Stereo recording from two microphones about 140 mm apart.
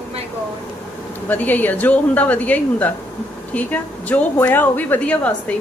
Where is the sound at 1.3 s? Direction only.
10° left (ahead or behind).